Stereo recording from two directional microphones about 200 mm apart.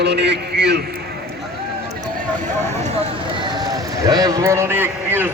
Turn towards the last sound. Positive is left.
turn(degrees=-10)  # may be behind; listen again after turning